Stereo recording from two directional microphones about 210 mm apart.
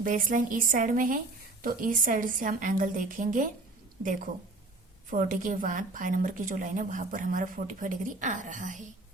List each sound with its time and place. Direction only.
0.0 s a woman's voice: 40° right (ahead or behind)